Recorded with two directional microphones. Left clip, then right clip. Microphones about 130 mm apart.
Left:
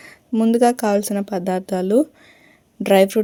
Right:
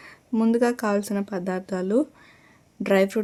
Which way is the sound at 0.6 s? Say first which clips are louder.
Left 7 dB; 20° left (ahead or behind).